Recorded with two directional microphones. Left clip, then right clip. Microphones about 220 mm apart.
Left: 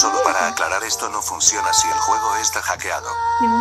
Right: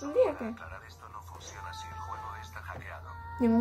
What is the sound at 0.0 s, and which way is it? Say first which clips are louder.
Speech: left 12 dB; 55° left (ahead or behind).